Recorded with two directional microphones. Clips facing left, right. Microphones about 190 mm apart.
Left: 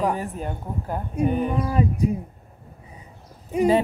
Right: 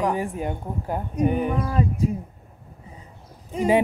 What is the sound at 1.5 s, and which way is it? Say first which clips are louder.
Speech: left 1 dB; 15° left (ahead or behind).